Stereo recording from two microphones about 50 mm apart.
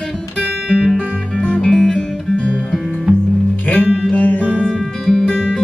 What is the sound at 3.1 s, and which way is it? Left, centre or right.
Music, right.